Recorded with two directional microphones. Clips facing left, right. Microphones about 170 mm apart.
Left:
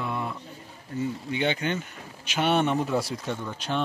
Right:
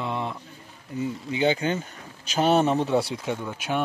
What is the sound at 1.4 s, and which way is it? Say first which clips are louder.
Speech: right 4 dB; 35° right (ahead or behind).